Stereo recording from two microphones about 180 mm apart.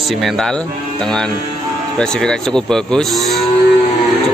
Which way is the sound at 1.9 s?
5° left (ahead or behind).